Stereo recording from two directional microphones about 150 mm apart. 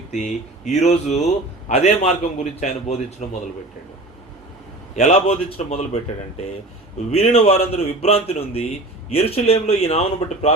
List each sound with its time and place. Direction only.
0.1 s a man's voice: 50° left (ahead or behind)
4.9 s a man's voice: 45° left (ahead or behind)